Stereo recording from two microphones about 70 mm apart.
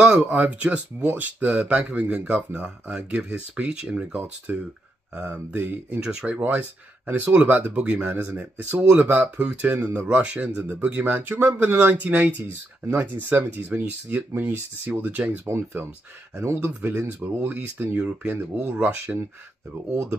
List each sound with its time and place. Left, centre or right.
0.0 s speech: centre
4.5 s speech: right
5.6 s speech: right
5.9 s speech: centre
7.3 s speech: right
15.5 s speech: right